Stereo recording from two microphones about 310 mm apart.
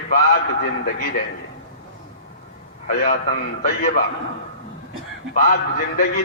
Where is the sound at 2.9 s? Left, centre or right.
Left.